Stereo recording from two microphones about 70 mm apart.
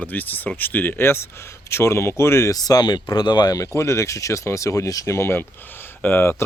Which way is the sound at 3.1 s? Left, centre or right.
Left.